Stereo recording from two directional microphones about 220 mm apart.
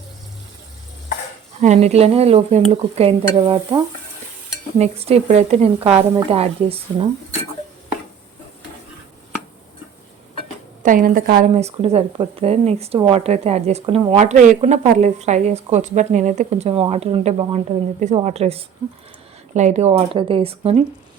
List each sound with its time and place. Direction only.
1.6 s speech: 30° right (ahead or behind)
10.8 s speech: 40° right (ahead or behind)